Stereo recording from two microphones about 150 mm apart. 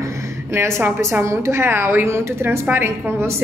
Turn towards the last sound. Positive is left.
turn(degrees=-15)  # may be behind; listen again after turning